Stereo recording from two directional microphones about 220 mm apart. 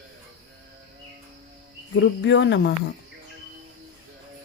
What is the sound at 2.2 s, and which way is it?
Speech, 55° left (ahead or behind).